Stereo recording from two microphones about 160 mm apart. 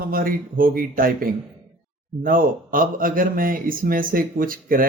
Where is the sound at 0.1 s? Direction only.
65° right (ahead or behind).